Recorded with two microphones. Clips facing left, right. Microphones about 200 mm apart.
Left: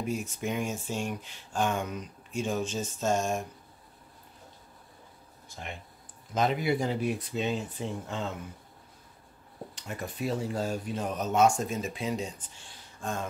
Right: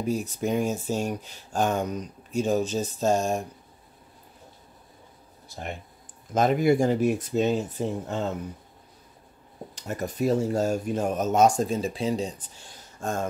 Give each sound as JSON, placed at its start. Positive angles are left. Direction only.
{"t": 0.0, "sound": "speech", "side_deg": -35}
{"t": 5.5, "sound": "speech", "side_deg": -40}
{"t": 9.8, "sound": "speech", "side_deg": -40}